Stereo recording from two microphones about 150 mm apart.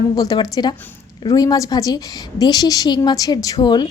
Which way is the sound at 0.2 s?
25° left (ahead or behind).